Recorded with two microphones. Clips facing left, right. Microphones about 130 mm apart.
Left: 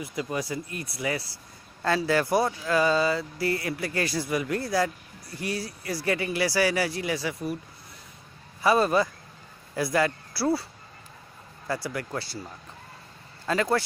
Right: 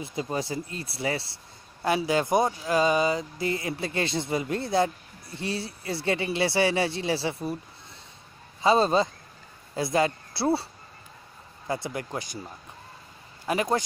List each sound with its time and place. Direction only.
0.0 s speech: 25° right (ahead or behind)
1.8 s speech: 15° right (ahead or behind)
8.5 s speech: 25° right (ahead or behind)
13.5 s speech: 20° right (ahead or behind)